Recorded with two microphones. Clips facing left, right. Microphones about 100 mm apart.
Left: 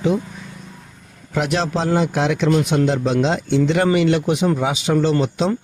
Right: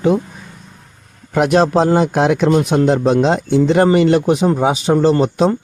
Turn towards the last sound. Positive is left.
turn(degrees=-45)  # may be behind; listen again after turning